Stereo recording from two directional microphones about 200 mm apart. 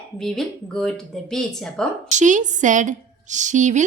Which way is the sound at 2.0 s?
40° right (ahead or behind).